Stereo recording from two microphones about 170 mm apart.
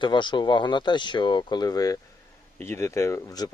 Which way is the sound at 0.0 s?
25° left (ahead or behind).